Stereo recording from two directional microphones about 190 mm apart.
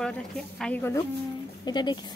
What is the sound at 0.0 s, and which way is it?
A woman's voice, 5° left (ahead or behind).